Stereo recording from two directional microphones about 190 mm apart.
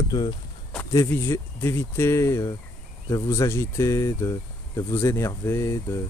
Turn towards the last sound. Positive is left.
turn(degrees=15)  # may be behind; listen again after turning